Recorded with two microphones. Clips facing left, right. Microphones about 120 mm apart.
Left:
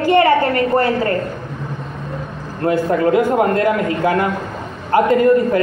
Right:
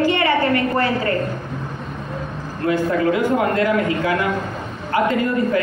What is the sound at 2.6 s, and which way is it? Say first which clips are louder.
A woman's voice: left 3 dB; 40° left (ahead or behind).